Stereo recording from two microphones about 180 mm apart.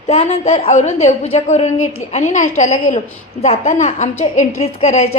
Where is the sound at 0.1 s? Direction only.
35° left (ahead or behind).